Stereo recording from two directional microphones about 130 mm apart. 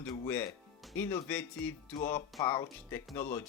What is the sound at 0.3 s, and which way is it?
Speech, 15° left (ahead or behind).